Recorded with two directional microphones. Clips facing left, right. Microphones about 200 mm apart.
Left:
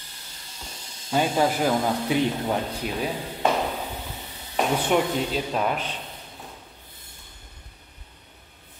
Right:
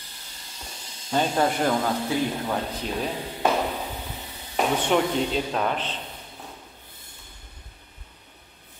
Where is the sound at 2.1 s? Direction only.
20° left (ahead or behind).